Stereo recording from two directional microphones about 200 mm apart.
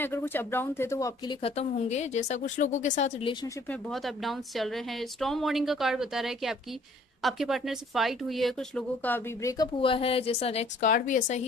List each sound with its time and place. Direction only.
0.0 s speech: 10° left (ahead or behind)
1.4 s a woman's voice: 35° left (ahead or behind)
3.9 s a woman's voice: centre (ahead or behind); by 9.7 s 15° left (ahead or behind)
9.8 s a woman's voice: 25° left (ahead or behind)